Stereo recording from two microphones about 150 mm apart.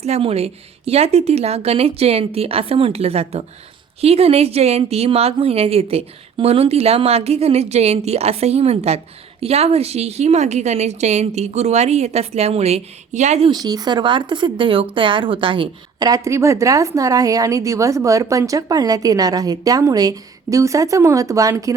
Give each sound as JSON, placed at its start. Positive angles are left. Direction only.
{"t": 0.0, "sound": "a woman's voice", "side_deg": -45}
{"t": 13.5, "sound": "speech", "side_deg": -25}